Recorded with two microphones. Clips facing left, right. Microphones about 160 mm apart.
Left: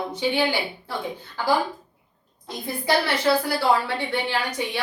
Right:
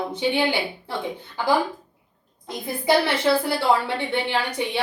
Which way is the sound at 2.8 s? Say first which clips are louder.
Right 2 dB; 25° right (ahead or behind).